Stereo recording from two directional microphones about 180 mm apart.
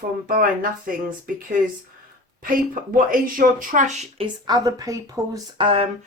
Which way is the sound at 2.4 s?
50° right (ahead or behind).